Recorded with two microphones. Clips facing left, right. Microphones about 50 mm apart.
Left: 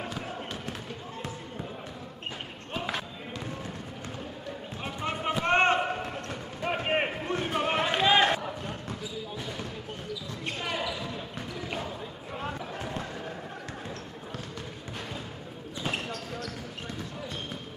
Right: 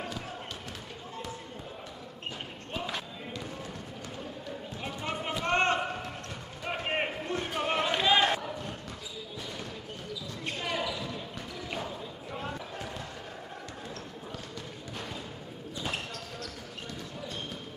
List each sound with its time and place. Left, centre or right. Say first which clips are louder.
4.8 s basketball bounce: left 4 dB; centre
10.4 s basketball bounce: even; centre
12.4 s basketball bounce: left 3 dB; centre
15.8 s basketball bounce: left 4 dB; centre